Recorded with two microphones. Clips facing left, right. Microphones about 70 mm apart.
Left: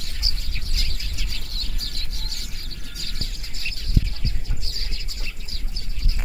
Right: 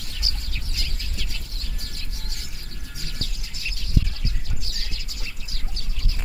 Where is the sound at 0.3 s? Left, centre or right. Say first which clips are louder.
Right 1 dB; left.